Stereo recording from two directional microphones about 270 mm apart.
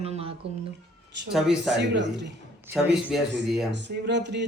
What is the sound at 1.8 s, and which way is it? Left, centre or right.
Speech, right.